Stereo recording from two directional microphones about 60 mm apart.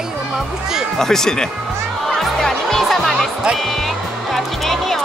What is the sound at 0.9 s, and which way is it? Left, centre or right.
Speech, centre.